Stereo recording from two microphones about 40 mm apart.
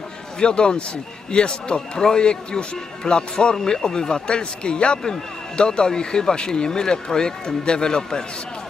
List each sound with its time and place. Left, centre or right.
0.3 s a man's voice: left